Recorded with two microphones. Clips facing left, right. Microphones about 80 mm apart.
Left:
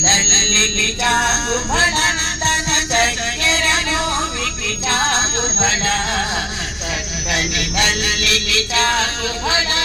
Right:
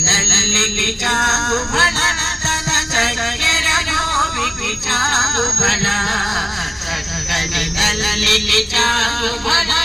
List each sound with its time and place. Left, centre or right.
0.3 s music: right
1.3 s speech: right
7.3 s music: right